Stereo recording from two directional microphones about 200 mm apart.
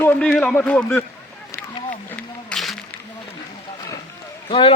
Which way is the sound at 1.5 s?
10° left (ahead or behind).